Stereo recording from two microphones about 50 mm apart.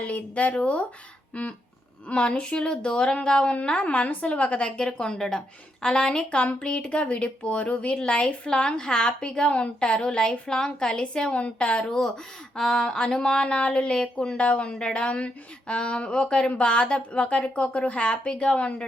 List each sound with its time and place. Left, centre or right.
0.0 s speech: left
4.8 s speech: centre